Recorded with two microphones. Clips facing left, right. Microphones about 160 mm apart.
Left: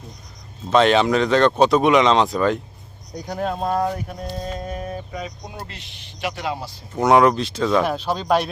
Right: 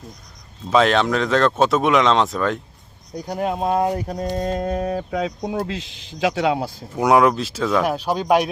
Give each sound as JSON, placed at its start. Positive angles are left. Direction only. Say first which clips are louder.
{"t": 0.7, "sound": "speech", "louder": "left 1 dB", "side_deg": 0}
{"t": 3.2, "sound": "speech", "louder": "right 2 dB", "side_deg": -10}
{"t": 3.9, "sound": "a sound", "louder": "right 5 dB", "side_deg": -35}
{"t": 4.5, "sound": "speech", "louder": "right 7 dB", "side_deg": -80}
{"t": 6.9, "sound": "speech", "louder": "left 1 dB", "side_deg": -5}